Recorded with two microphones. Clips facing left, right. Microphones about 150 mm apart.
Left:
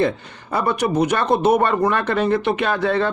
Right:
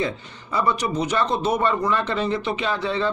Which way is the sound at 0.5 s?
55° left (ahead or behind).